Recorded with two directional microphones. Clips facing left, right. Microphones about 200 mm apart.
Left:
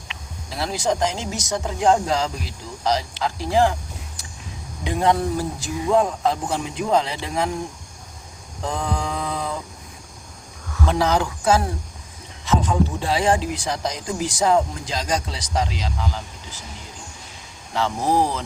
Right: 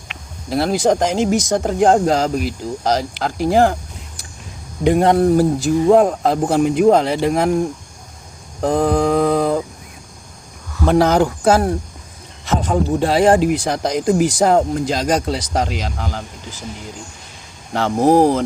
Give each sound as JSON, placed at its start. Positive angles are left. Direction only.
{"t": 0.1, "sound": "speech", "side_deg": -55}
{"t": 4.8, "sound": "speech", "side_deg": -60}
{"t": 8.6, "sound": "speech", "side_deg": -50}
{"t": 10.8, "sound": "speech", "side_deg": -55}
{"t": 17.7, "sound": "speech", "side_deg": -50}